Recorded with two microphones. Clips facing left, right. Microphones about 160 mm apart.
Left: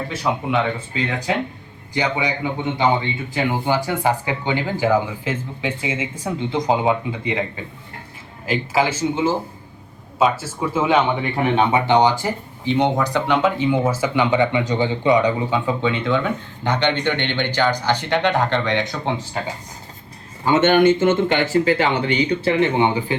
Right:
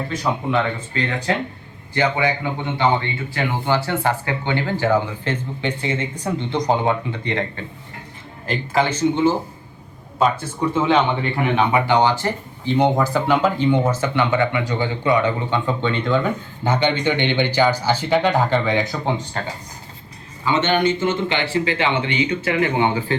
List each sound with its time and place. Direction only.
0.1 s speech: 5° left (ahead or behind)
11.2 s speech: 25° left (ahead or behind)
12.6 s speech: centre (ahead or behind); by 15.3 s 20° left (ahead or behind)
15.4 s speech: 5° left (ahead or behind)
20.4 s a man's voice: 50° left (ahead or behind); by 22.7 s 30° left (ahead or behind)
22.8 s speech: 15° left (ahead or behind)